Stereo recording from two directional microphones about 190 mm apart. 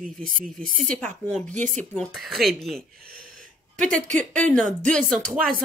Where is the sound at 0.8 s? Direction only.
10° left (ahead or behind).